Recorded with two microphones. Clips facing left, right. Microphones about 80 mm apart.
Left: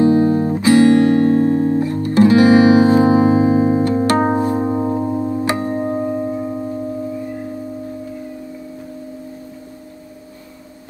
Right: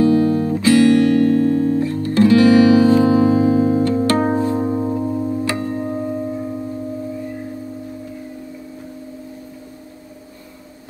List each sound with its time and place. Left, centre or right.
0.0 s guitar: left